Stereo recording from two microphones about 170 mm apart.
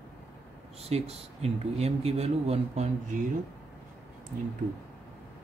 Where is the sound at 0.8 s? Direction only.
35° right (ahead or behind).